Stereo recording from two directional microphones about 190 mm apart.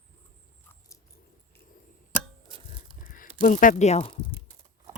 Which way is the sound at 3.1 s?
45° left (ahead or behind).